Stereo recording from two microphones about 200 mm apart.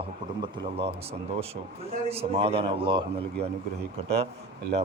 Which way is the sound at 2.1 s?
30° right (ahead or behind).